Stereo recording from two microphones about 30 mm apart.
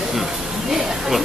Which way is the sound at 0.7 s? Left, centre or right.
Centre.